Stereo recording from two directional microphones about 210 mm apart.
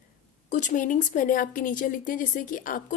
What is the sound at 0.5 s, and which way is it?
Speech, 35° left (ahead or behind).